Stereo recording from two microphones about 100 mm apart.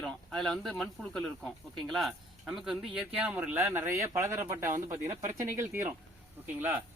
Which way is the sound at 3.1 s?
15° right (ahead or behind).